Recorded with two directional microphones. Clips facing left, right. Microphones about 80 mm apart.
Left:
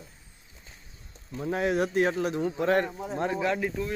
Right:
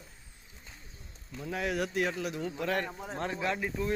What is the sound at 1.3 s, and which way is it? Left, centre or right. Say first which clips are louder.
Speech: left 6 dB; left.